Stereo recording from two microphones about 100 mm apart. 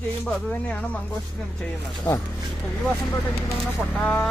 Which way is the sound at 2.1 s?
20° left (ahead or behind).